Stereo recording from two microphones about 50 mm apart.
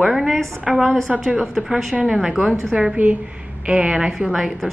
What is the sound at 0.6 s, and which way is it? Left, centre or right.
Speech, centre.